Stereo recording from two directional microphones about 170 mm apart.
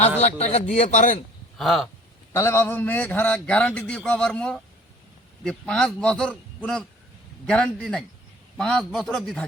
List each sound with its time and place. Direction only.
0.2 s a man's voice: 40° left (ahead or behind)
1.5 s a man's voice: centre (ahead or behind)
2.3 s a man's voice: 15° left (ahead or behind)